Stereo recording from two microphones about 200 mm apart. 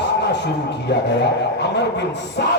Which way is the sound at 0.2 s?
60° left (ahead or behind).